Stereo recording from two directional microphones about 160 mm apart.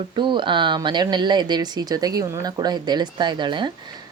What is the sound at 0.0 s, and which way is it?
Speech, 30° right (ahead or behind).